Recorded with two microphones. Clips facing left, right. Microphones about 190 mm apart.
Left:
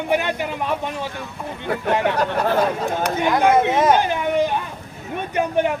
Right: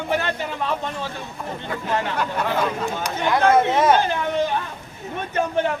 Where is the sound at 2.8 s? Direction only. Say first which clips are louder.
Left 4 dB; 55° left (ahead or behind).